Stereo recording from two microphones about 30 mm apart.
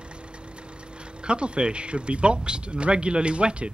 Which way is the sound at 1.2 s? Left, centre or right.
Right.